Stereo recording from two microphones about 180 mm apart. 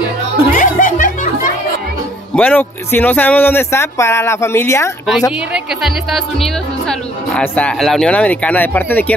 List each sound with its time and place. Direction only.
0.5 s music: 50° left (ahead or behind)
2.3 s speech: 10° left (ahead or behind)
5.5 s speech: centre (ahead or behind)